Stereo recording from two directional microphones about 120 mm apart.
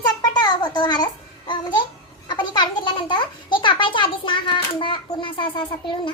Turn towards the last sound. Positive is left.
turn(degrees=40)  # may be behind; listen again after turning